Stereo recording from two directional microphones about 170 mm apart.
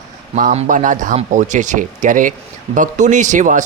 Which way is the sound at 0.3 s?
50° right (ahead or behind).